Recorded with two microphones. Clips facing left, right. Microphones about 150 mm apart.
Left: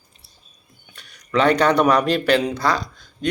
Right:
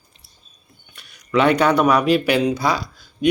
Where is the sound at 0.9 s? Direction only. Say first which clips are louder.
Right 2 dB; 5° right (ahead or behind).